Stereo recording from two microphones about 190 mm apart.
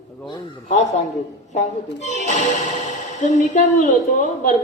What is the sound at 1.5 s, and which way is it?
A man's voice, 40° left (ahead or behind).